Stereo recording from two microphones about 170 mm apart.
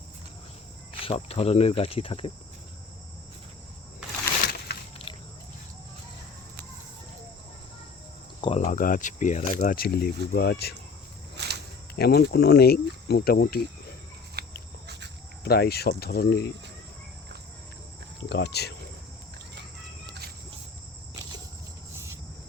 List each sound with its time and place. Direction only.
1.0 s speech: 35° left (ahead or behind)
5.0 s cricket: 30° left (ahead or behind)
8.4 s speech: 35° left (ahead or behind); by 10.8 s 70° left (ahead or behind)
11.4 s a sound: 80° right
11.9 s speech: 70° left (ahead or behind)
14.4 s a sound: 70° right (ahead or behind)
15.4 s speech: 65° left (ahead or behind)
18.3 s speech: 85° left